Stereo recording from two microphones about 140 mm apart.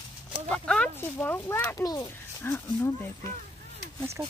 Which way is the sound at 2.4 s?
15° left (ahead or behind).